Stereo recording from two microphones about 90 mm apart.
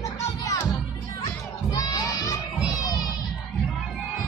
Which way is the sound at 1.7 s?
45° left (ahead or behind).